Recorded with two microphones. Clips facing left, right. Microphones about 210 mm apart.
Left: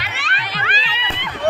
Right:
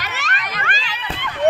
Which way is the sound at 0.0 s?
45° right (ahead or behind).